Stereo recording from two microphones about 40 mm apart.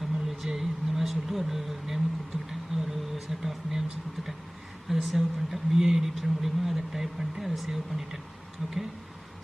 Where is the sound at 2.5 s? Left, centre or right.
Centre.